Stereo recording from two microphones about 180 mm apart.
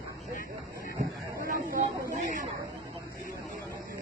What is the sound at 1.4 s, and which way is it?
Chatter, 50° right (ahead or behind).